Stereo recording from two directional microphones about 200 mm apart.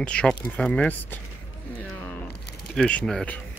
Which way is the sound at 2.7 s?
5° left (ahead or behind).